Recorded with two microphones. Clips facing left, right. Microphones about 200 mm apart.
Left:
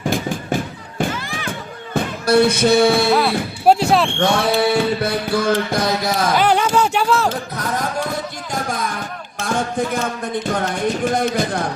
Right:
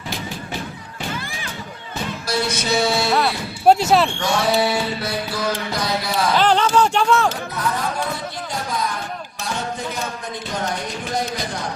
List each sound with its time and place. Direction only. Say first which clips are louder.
0.0 s a sound: left 8 dB; 50° left (ahead or behind)
1.9 s music: left 9 dB; 55° left (ahead or behind)
3.1 s speech: left 4 dB; centre (ahead or behind)
4.2 s music: left 3 dB; 55° left (ahead or behind)
6.3 s speech: even; 10° left (ahead or behind)
9.4 s music: left 7 dB; 50° left (ahead or behind)
11.0 s music: left 5 dB; 55° left (ahead or behind)